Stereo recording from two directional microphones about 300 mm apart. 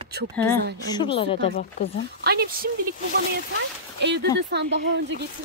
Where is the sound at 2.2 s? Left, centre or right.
Right.